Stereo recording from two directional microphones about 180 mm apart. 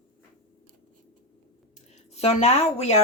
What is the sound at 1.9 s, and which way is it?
A woman's voice, 35° left (ahead or behind).